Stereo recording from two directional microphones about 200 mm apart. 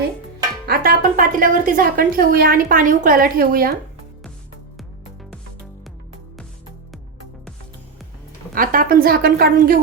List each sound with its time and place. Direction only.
0.7 s a woman's voice: 45° right (ahead or behind)
8.5 s a woman's voice: 45° right (ahead or behind)